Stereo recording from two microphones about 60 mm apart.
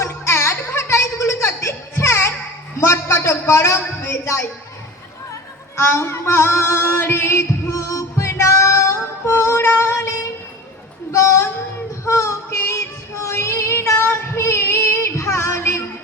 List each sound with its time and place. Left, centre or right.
0.0 s music: left
2.8 s a sound: left
5.3 s music: left
9.3 s female singing: left
11.1 s a sound: left
12.0 s child singing: left